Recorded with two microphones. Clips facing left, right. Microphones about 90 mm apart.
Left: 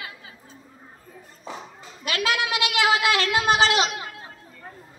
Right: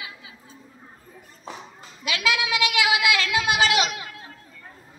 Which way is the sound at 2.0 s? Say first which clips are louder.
Even; 45° left (ahead or behind).